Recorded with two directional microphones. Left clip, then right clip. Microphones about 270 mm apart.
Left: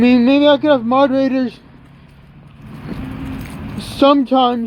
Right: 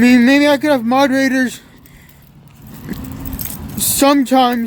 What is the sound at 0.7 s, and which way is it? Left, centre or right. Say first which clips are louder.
Speech: even; right.